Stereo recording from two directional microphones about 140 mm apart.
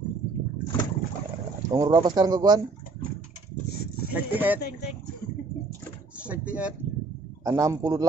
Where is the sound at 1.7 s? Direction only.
30° right (ahead or behind).